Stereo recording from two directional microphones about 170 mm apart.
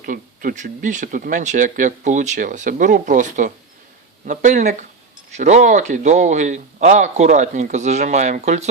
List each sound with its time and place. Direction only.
0.0 s speech: 55° right (ahead or behind)